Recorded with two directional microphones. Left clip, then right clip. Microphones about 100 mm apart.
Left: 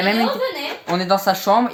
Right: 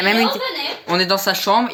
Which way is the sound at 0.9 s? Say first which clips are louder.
Even; 30° left (ahead or behind).